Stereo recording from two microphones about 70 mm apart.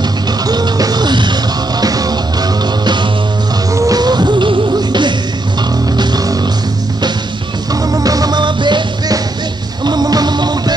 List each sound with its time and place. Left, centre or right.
0.5 s music: right
1.8 s music: right
2.8 s music: right
3.7 s music: right
4.0 s music: right
7.9 s music: right
9.8 s music: right